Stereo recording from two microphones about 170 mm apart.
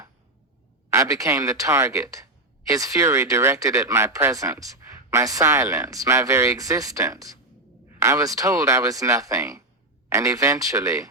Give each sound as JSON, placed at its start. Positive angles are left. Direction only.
{"t": 0.9, "sound": "speech", "side_deg": -20}